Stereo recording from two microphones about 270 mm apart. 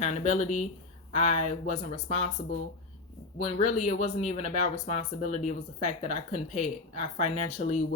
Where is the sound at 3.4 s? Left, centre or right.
Centre.